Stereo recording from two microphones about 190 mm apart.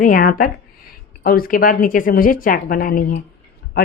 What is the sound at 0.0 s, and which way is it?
A woman's voice, 50° left (ahead or behind).